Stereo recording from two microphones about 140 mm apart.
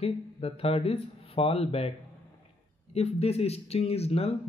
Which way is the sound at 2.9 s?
45° left (ahead or behind).